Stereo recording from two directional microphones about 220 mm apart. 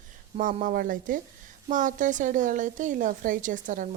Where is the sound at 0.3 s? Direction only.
35° right (ahead or behind).